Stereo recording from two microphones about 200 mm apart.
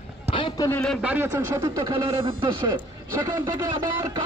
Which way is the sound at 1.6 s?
20° right (ahead or behind).